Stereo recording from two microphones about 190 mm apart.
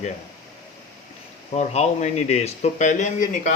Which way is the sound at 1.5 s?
35° left (ahead or behind).